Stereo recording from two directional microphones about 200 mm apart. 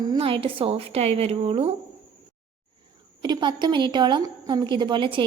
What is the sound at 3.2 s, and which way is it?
A woman's voice, 20° right (ahead or behind).